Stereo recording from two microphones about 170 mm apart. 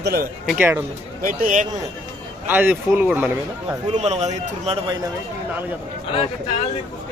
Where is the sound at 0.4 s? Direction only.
5° right (ahead or behind).